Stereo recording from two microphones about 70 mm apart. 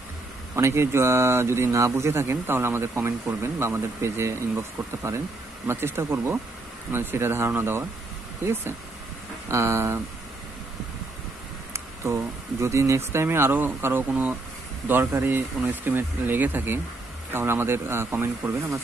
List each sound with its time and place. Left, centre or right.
0.6 s speech: right
9.5 s speech: right
11.7 s speech: right